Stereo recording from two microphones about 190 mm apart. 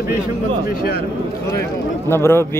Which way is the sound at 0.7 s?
50° left (ahead or behind).